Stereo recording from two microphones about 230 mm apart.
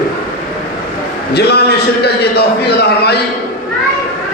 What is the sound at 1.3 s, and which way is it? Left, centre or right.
A man's voice, left.